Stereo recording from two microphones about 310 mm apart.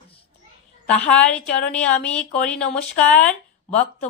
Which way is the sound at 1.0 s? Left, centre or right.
Centre.